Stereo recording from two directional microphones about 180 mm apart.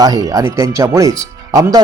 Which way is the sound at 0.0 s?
20° right (ahead or behind).